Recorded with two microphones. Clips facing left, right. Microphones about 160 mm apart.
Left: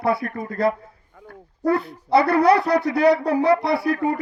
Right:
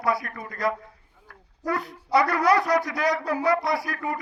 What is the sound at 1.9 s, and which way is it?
A man's voice, 30° left (ahead or behind).